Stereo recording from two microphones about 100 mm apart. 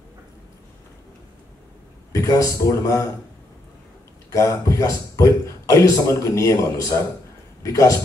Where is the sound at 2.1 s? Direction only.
35° left (ahead or behind).